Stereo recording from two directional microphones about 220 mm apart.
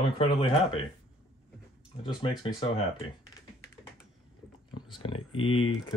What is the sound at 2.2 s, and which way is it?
Speech, 25° left (ahead or behind).